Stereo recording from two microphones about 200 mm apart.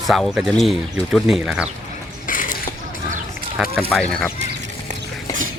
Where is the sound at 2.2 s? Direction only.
45° left (ahead or behind).